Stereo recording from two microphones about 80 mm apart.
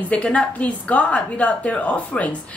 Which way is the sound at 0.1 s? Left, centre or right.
Centre.